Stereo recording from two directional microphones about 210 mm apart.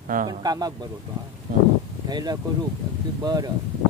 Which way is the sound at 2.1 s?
20° right (ahead or behind).